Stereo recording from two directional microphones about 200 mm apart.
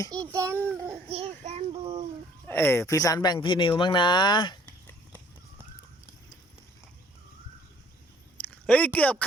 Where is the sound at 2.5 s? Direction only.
10° left (ahead or behind).